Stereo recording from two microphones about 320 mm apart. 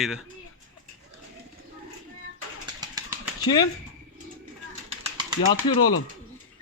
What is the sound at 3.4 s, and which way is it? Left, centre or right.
Speech, centre.